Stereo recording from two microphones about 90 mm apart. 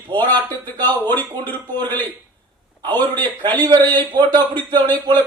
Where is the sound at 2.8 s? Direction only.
55° right (ahead or behind).